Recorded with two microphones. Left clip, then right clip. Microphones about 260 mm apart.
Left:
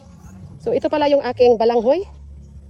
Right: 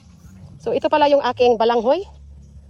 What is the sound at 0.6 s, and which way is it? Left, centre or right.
Speech, right.